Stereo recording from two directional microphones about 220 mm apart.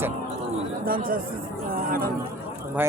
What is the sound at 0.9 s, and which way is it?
Speech, 40° right (ahead or behind).